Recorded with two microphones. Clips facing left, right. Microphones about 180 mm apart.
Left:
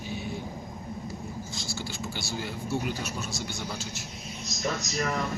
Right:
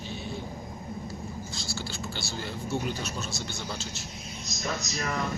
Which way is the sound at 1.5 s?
15° left (ahead or behind).